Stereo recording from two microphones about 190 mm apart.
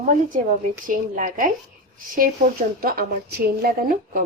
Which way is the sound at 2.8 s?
50° right (ahead or behind).